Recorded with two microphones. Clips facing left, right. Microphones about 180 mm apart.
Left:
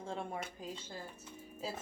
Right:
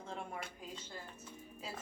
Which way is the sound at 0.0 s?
30° left (ahead or behind).